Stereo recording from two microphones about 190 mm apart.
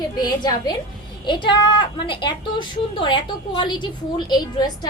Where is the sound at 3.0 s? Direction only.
25° left (ahead or behind).